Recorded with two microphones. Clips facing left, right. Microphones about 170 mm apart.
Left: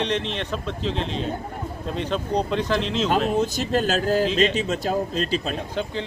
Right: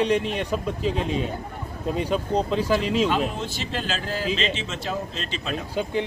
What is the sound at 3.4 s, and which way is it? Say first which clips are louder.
A man's voice: left 8 dB; 45° left (ahead or behind).